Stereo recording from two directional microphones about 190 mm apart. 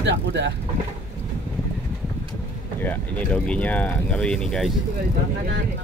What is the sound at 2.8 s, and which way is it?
Speech, 10° left (ahead or behind).